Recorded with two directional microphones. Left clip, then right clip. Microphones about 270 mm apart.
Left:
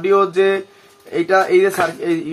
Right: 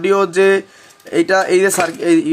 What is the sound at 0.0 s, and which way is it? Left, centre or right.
Speech, right.